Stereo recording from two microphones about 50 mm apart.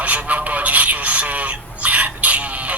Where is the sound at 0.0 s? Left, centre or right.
Right.